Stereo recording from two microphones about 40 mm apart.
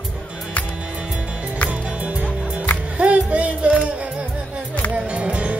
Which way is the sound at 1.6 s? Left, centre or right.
Right.